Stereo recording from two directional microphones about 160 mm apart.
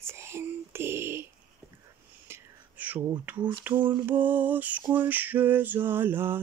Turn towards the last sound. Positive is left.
turn(degrees=-15)  # may be behind; listen again after turning